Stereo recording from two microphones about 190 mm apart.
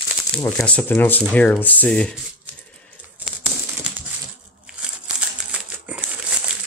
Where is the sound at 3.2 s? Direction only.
5° right (ahead or behind).